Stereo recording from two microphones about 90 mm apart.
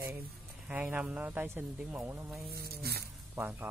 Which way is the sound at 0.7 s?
10° right (ahead or behind).